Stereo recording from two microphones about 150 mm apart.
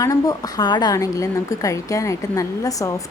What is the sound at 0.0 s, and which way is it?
Speech, 25° left (ahead or behind).